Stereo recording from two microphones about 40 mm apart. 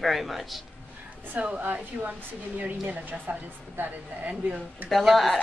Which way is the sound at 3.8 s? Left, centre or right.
Right.